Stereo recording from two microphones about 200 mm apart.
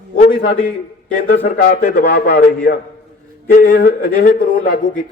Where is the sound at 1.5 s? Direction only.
50° left (ahead or behind).